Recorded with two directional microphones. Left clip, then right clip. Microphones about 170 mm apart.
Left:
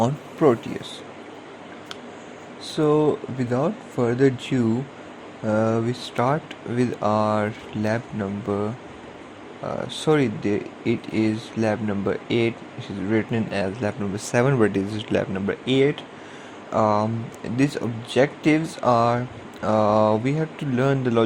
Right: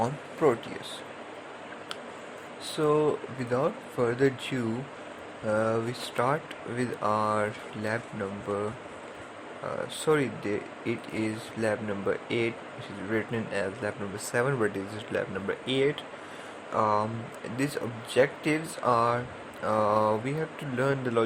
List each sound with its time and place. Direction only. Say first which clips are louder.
0.0 s speech: left 6 dB; 35° left (ahead or behind)
2.6 s speech: left 5 dB; 30° left (ahead or behind)
9.6 s speech: left 5 dB; 35° left (ahead or behind)